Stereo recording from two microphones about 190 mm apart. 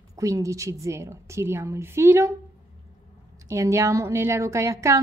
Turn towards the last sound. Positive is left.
turn(degrees=-15)  # may be behind; listen again after turning